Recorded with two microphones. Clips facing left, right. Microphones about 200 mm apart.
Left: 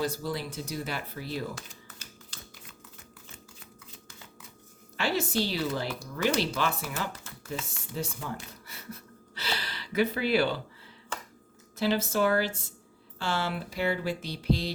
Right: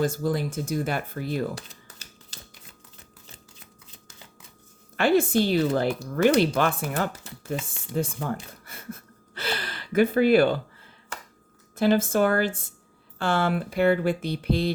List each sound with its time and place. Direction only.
0.0 s speech: 50° right (ahead or behind)
4.9 s speech: 55° right (ahead or behind)
7.3 s speech: 15° right (ahead or behind)
7.9 s speech: 55° right (ahead or behind)
11.8 s speech: 50° right (ahead or behind)